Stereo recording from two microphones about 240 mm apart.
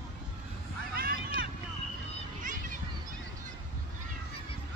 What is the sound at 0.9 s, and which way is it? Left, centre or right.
Vehicle, right.